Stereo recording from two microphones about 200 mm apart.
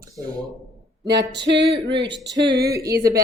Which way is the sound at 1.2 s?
60° right (ahead or behind).